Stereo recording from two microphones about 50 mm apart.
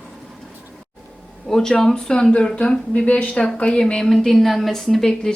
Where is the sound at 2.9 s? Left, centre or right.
Left.